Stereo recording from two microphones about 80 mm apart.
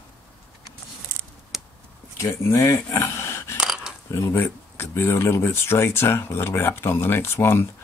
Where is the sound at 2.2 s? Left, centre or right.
Left.